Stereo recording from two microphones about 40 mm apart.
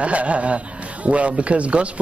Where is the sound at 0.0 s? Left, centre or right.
Right.